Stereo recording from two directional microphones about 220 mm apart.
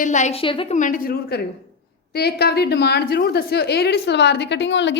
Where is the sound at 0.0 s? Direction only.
35° left (ahead or behind).